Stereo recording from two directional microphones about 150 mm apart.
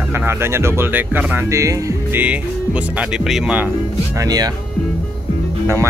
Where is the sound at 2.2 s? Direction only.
10° right (ahead or behind).